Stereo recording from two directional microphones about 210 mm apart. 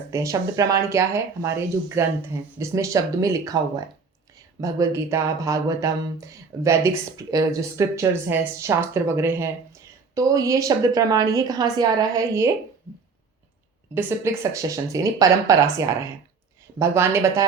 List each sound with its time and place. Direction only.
0.1 s speech: 15° right (ahead or behind)
13.9 s speech: 10° right (ahead or behind)
16.7 s speech: 15° right (ahead or behind)